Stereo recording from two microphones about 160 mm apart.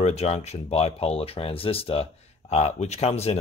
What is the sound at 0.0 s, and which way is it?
Speech, 40° left (ahead or behind).